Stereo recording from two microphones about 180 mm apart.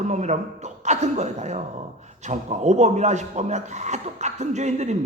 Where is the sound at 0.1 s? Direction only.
40° right (ahead or behind).